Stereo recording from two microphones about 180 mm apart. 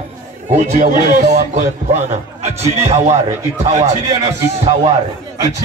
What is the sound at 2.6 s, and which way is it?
Speech, 35° right (ahead or behind).